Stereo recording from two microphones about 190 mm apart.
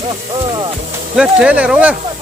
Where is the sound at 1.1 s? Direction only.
5° right (ahead or behind).